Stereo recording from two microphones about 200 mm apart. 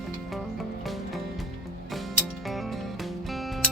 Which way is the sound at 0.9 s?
Centre (ahead or behind).